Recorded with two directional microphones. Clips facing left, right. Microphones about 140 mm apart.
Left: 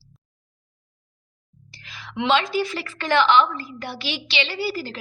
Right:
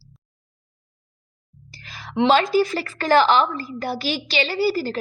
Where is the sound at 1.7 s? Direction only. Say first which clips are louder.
Right 5 dB; 40° right (ahead or behind).